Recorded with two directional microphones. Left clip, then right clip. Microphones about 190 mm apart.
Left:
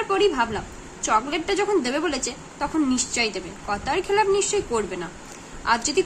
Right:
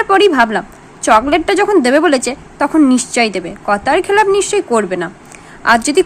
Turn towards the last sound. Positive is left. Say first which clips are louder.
# right 11 dB
turn(degrees=-40)  # may be behind; listen again after turning